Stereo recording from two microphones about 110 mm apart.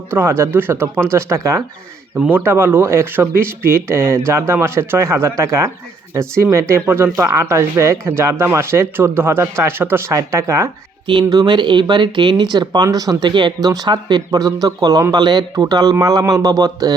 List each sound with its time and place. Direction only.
0.1 s speech: 20° right (ahead or behind)
11.0 s speech: 45° right (ahead or behind)